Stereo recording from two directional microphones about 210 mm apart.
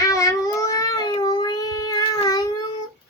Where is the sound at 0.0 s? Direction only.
15° left (ahead or behind).